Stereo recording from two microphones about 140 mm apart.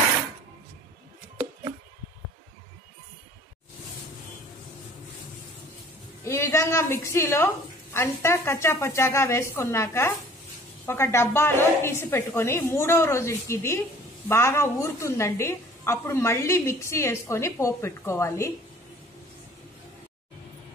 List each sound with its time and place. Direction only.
6.2 s a woman's voice: 20° left (ahead or behind)